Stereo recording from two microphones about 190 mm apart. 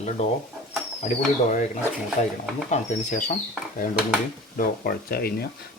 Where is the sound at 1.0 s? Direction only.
40° left (ahead or behind).